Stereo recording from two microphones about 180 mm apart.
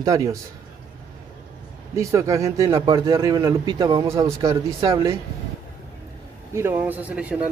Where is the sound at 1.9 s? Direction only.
15° right (ahead or behind).